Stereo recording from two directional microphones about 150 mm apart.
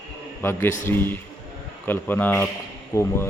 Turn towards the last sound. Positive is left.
turn(degrees=20)  # may be behind; listen again after turning